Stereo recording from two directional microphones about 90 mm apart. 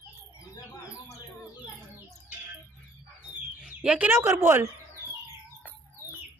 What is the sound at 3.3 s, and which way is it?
Bird, 15° right (ahead or behind).